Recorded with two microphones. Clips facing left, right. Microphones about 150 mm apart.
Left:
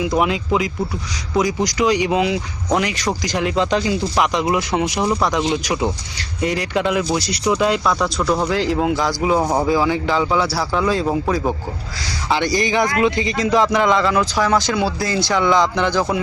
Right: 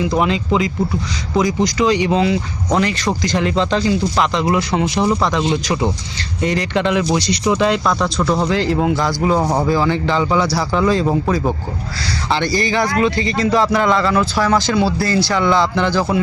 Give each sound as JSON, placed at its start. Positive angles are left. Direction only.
{"t": 0.2, "sound": "a man's voice", "side_deg": 10}
{"t": 12.3, "sound": "a man's voice", "side_deg": 15}